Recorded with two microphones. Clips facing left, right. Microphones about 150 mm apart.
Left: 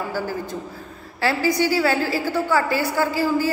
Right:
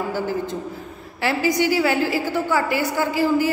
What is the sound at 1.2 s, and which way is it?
A woman's voice, 15° right (ahead or behind).